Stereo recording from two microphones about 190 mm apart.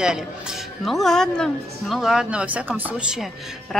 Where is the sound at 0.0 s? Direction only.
5° right (ahead or behind).